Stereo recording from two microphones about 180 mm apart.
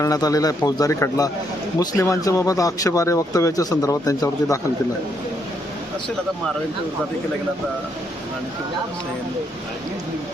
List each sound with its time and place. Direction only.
0.0 s speech: 20° left (ahead or behind)